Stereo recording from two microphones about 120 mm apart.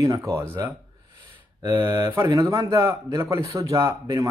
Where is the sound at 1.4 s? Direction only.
35° right (ahead or behind).